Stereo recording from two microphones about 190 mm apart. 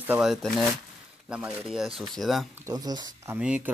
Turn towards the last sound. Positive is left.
turn(degrees=-5)  # may be behind; listen again after turning